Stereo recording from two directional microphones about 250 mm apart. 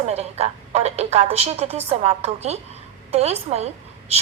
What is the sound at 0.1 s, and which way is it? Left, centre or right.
A woman's voice, right.